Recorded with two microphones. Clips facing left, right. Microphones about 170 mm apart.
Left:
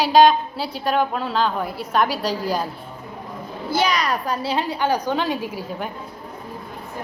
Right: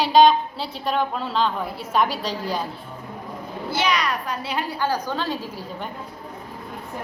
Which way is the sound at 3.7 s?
40° left (ahead or behind).